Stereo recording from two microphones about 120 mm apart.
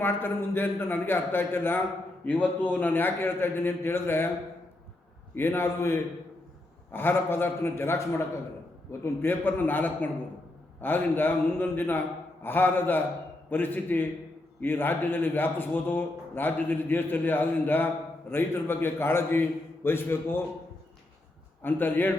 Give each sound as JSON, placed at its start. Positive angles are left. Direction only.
{"t": 0.0, "sound": "a man's voice", "side_deg": 15}
{"t": 5.3, "sound": "a man's voice", "side_deg": 20}
{"t": 21.6, "sound": "a man's voice", "side_deg": 15}